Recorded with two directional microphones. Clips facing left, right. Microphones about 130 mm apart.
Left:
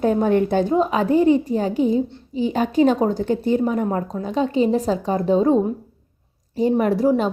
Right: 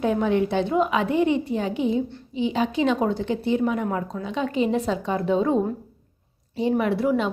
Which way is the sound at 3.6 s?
35° left (ahead or behind).